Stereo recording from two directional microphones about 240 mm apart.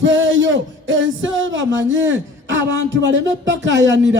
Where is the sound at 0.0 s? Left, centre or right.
Right.